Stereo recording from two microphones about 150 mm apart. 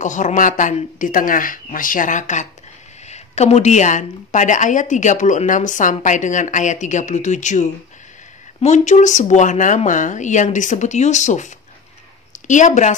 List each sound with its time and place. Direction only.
0.0 s a woman's voice: 55° left (ahead or behind)